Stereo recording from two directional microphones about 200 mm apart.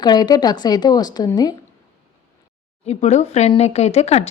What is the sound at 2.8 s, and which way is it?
Speech, 35° left (ahead or behind).